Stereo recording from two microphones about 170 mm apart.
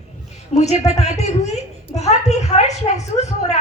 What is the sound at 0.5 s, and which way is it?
A woman's voice, 40° left (ahead or behind).